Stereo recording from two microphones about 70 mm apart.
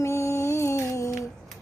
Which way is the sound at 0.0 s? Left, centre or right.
Left.